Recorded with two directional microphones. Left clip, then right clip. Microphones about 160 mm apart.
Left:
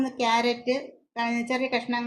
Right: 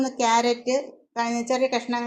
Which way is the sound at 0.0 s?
20° right (ahead or behind).